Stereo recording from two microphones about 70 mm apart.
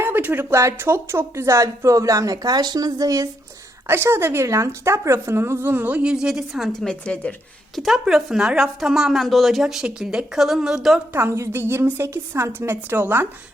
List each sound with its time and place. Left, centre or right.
0.0 s a sound: right
0.5 s speech: right
3.8 s a woman's voice: right
4.4 s a woman's voice: right
6.0 s a woman's voice: centre
6.7 s a woman's voice: centre
7.8 s a woman's voice: centre
11.1 s a woman's voice: right